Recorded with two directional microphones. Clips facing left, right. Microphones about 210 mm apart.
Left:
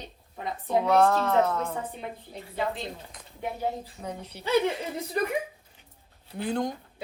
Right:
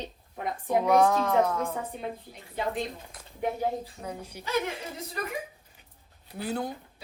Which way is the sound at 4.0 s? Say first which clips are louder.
Left 1 dB; 10° right (ahead or behind).